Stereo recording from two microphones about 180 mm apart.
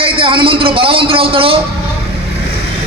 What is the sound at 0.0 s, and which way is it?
Speech, 30° right (ahead or behind).